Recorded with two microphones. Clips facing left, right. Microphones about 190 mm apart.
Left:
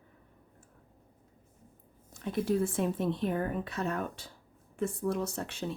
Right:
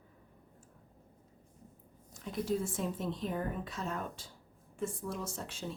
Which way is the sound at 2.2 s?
65° left (ahead or behind).